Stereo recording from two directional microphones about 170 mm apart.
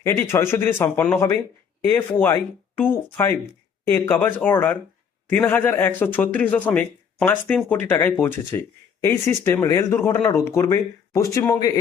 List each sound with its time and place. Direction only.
0.0 s speech: 15° left (ahead or behind)